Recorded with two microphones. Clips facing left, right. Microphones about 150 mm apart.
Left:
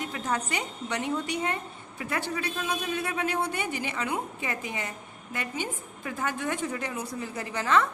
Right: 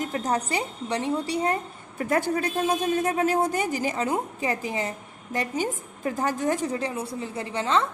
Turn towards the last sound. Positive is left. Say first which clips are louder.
# right 1 dB
turn(degrees=-25)  # may be behind; listen again after turning